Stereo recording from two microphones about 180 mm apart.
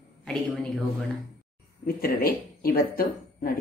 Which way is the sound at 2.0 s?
55° left (ahead or behind).